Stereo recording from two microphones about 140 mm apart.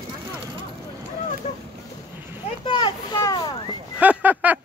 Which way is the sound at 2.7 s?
30° left (ahead or behind).